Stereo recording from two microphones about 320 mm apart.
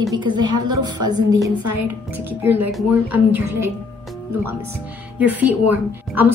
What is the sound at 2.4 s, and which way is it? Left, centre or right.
Speech, centre.